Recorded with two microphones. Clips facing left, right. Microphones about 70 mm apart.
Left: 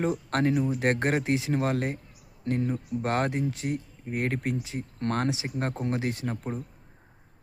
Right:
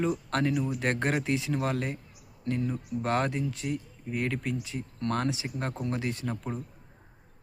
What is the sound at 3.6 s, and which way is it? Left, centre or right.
Speech, left.